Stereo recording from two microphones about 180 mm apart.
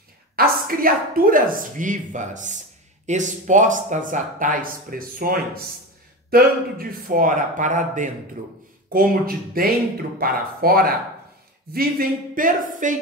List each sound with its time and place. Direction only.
0.4 s speech: 50° right (ahead or behind)